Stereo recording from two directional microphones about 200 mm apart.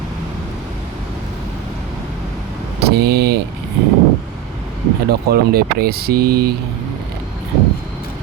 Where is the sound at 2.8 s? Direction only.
55° right (ahead or behind).